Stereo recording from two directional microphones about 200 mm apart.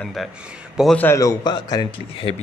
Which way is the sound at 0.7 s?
Centre (ahead or behind).